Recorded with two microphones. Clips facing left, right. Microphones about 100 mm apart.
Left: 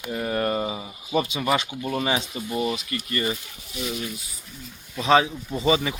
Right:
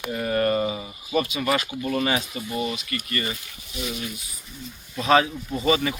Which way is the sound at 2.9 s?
20° left (ahead or behind).